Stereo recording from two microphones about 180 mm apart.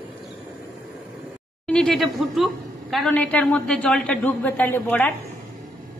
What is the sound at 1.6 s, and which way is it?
A woman's voice, 5° left (ahead or behind).